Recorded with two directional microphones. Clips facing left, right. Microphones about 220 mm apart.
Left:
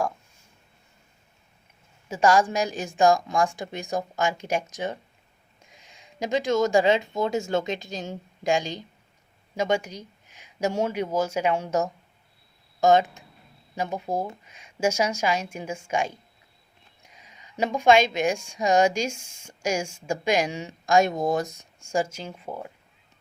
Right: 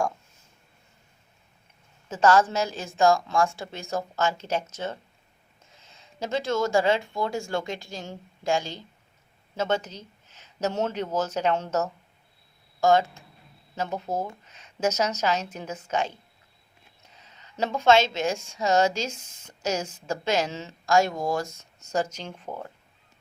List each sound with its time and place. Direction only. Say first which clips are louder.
2.0 s a woman's voice: even; 10° left (ahead or behind)